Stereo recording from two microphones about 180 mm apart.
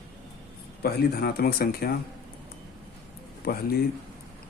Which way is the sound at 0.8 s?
60° left (ahead or behind).